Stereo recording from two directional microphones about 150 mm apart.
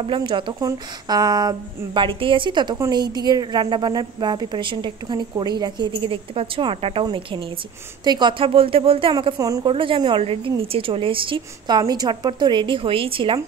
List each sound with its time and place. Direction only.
0.0 s a woman's voice: 35° right (ahead or behind)
9.4 s a woman's voice: 25° right (ahead or behind)
9.7 s a woman's voice: 35° right (ahead or behind)